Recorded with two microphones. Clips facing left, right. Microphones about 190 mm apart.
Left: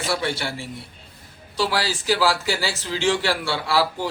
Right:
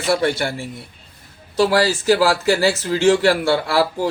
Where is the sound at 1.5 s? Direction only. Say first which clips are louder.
Right 8 dB; 45° right (ahead or behind).